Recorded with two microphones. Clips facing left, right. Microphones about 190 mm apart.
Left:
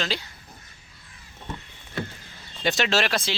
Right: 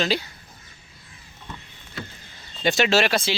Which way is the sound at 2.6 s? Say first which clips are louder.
Right 4 dB; centre (ahead or behind).